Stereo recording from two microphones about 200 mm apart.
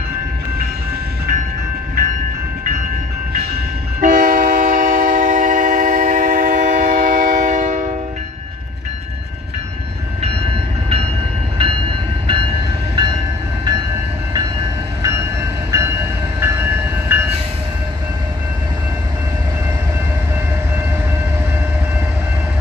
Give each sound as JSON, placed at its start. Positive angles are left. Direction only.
{"t": 3.3, "sound": "train", "side_deg": -45}
{"t": 10.2, "sound": "train", "side_deg": -30}
{"t": 15.0, "sound": "train", "side_deg": -15}
{"t": 16.3, "sound": "train", "side_deg": -10}